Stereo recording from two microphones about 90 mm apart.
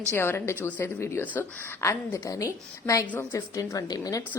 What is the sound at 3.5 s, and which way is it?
Speech, 40° left (ahead or behind).